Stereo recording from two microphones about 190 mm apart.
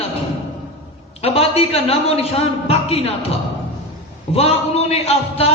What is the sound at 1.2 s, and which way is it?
Speech, 30° left (ahead or behind).